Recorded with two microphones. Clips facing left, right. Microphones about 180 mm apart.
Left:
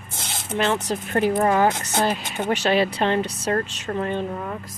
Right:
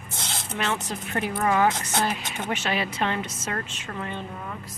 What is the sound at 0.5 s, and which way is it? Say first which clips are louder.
A woman's voice: left 7 dB; 35° left (ahead or behind).